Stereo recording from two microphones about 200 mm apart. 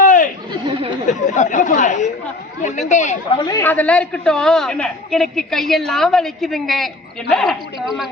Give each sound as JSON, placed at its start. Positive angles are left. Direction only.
{"t": 0.0, "sound": "chatter", "side_deg": 40}
{"t": 0.6, "sound": "chatter", "side_deg": -25}
{"t": 1.3, "sound": "chatter", "side_deg": 40}
{"t": 2.9, "sound": "speech", "side_deg": 35}
{"t": 3.4, "sound": "a man's voice", "side_deg": 15}